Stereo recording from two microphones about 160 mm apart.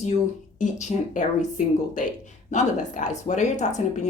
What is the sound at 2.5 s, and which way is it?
Speech, 50° left (ahead or behind).